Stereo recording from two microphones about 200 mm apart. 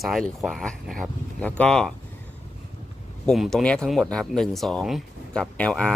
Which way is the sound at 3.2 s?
Centre (ahead or behind).